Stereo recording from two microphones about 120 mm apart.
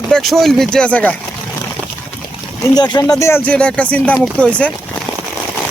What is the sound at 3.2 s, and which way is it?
Speech, 20° left (ahead or behind).